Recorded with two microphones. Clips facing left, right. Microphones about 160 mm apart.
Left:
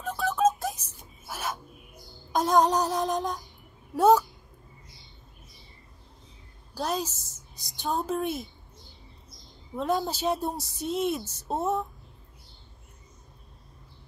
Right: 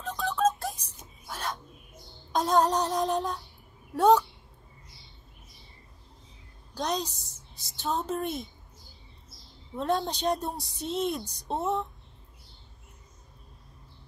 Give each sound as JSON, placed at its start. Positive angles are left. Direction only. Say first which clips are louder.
{"t": 0.0, "sound": "music", "louder": "left 2 dB", "side_deg": 10}
{"t": 1.2, "sound": "a sound", "louder": "left 1 dB", "side_deg": 10}
{"t": 2.0, "sound": "music", "louder": "left 1 dB", "side_deg": -20}
{"t": 2.3, "sound": "music", "louder": "left 2 dB", "side_deg": 5}
{"t": 3.9, "sound": "speech", "louder": "left 1 dB", "side_deg": 5}
{"t": 6.7, "sound": "music", "louder": "left 1 dB", "side_deg": 5}
{"t": 7.5, "sound": "speech", "louder": "left 1 dB", "side_deg": 15}
{"t": 7.9, "sound": "bird", "louder": "left 2 dB", "side_deg": 5}
{"t": 10.8, "sound": "music", "louder": "left 2 dB", "side_deg": 5}